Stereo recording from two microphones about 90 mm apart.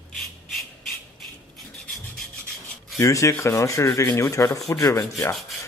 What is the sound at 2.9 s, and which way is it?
Rub, 35° left (ahead or behind).